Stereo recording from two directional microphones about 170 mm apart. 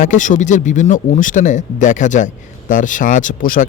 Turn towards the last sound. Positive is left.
turn(degrees=50)  # may be behind; listen again after turning